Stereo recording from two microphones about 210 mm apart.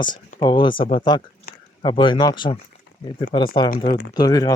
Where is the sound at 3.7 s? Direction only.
45° left (ahead or behind).